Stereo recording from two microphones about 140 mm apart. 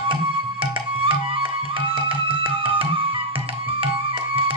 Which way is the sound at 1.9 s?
40° right (ahead or behind).